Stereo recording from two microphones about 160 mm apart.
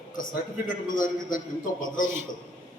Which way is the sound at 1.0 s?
55° left (ahead or behind).